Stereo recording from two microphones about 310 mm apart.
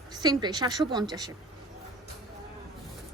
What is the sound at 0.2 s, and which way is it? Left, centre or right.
A woman's voice, centre.